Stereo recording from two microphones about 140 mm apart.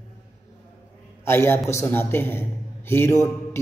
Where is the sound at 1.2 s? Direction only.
15° left (ahead or behind).